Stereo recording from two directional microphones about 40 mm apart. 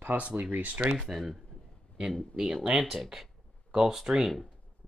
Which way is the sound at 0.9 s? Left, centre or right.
Centre.